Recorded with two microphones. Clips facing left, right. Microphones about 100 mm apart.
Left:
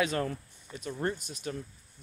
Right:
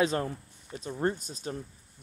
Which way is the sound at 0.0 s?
30° right (ahead or behind).